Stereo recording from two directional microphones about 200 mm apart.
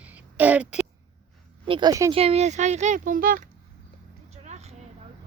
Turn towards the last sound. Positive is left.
turn(degrees=-35)  # may be behind; listen again after turning